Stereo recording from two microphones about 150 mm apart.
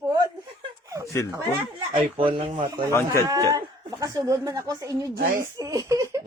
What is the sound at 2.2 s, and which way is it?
Speech, 35° right (ahead or behind).